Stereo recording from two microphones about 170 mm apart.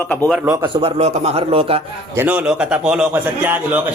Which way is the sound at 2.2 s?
10° right (ahead or behind).